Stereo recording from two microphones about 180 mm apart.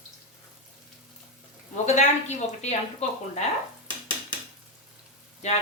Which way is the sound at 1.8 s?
40° left (ahead or behind).